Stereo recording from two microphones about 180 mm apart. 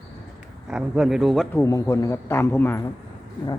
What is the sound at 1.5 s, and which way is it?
A man's voice, 15° left (ahead or behind).